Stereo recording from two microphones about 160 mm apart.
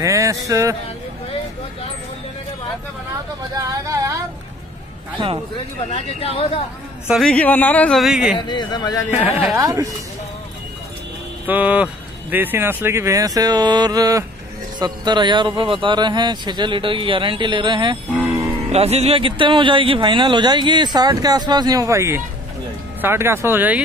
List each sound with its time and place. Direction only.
0.0 s music: 20° right (ahead or behind)
3.5 s speech: 20° right (ahead or behind)
5.9 s speech: 40° left (ahead or behind)
7.1 s a man's voice: centre (ahead or behind)
8.4 s a man's voice: 30° left (ahead or behind)
9.6 s speech: 20° right (ahead or behind)
11.4 s speech: 10° right (ahead or behind); by 17.9 s 30° right (ahead or behind)
18.1 s music: 15° right (ahead or behind)
18.7 s speech: 40° right (ahead or behind); by 23.8 s 10° right (ahead or behind)